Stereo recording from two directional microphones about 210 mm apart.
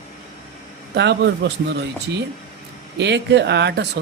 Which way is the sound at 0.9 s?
55° right (ahead or behind).